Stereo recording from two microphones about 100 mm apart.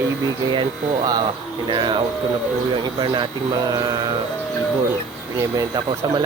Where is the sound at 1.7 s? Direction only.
50° right (ahead or behind).